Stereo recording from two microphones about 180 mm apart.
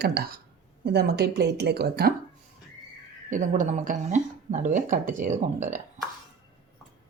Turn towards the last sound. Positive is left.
turn(degrees=-45)  # may be behind; listen again after turning